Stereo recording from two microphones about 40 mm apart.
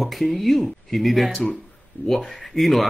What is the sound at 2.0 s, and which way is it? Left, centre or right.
Speech, left.